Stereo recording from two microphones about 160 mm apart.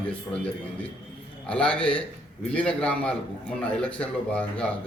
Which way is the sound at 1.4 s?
5° left (ahead or behind).